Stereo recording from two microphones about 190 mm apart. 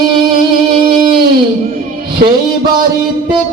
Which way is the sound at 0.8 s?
45° right (ahead or behind).